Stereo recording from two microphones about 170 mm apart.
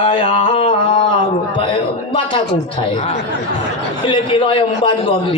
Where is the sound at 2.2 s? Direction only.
30° left (ahead or behind).